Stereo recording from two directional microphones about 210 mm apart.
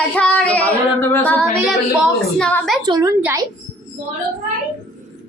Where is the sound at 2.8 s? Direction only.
20° right (ahead or behind).